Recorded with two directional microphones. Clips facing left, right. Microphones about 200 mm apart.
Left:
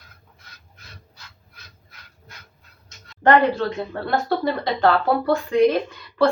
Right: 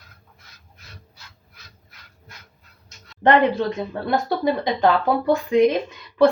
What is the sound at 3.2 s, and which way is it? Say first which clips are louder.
Speech: even; 15° right (ahead or behind).